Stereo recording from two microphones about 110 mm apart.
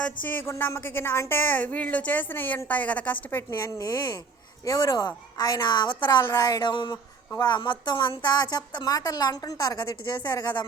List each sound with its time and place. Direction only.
0.0 s speech: 15° left (ahead or behind)
3.8 s a woman's voice: 35° left (ahead or behind)